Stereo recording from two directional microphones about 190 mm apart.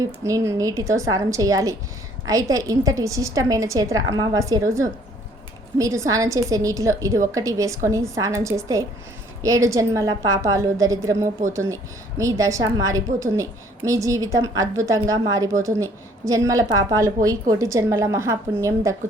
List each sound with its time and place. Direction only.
0.0 s a woman's voice: 15° right (ahead or behind)